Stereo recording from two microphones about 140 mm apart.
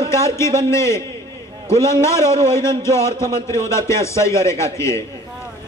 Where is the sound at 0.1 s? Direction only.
20° left (ahead or behind).